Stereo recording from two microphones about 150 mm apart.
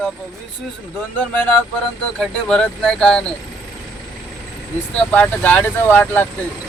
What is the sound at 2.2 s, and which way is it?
Speech, 5° left (ahead or behind).